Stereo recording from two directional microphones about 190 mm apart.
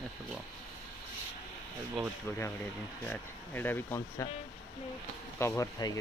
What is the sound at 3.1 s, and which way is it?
Speech, 10° left (ahead or behind).